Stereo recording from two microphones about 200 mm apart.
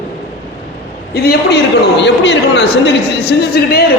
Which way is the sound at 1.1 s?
50° left (ahead or behind).